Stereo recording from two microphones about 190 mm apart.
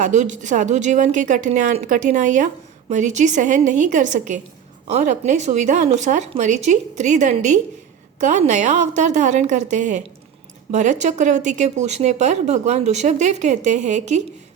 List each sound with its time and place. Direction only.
0.0 s speech: 40° right (ahead or behind)